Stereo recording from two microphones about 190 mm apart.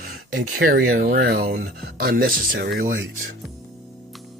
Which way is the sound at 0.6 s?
50° right (ahead or behind).